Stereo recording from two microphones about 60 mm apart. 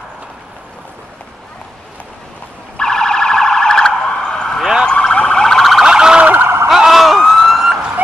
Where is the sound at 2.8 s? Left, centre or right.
Centre.